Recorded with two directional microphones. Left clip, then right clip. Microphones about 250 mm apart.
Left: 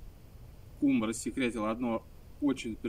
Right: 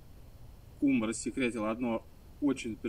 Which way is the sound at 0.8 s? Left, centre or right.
Centre.